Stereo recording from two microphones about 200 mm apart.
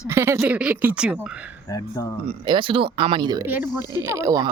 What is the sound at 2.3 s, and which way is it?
Speech, 25° right (ahead or behind).